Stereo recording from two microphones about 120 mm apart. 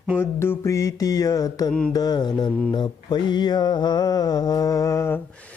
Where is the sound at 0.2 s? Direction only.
20° left (ahead or behind).